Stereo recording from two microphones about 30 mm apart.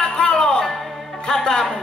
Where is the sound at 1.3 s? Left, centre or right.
Centre.